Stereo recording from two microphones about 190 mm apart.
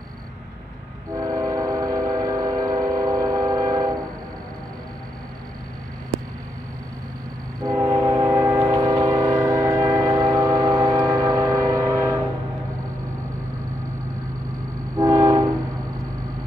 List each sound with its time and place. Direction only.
1.1 s train: 15° right (ahead or behind)
7.6 s train: 15° right (ahead or behind)
15.0 s train: 15° right (ahead or behind)